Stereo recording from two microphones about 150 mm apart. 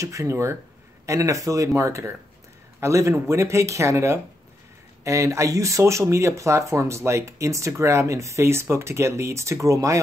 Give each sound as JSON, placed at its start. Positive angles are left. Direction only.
{"t": 0.0, "sound": "speech", "side_deg": -20}